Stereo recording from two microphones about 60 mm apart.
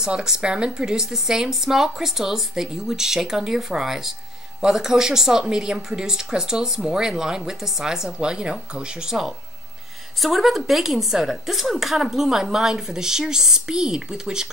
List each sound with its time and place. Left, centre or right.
0.0 s speech: centre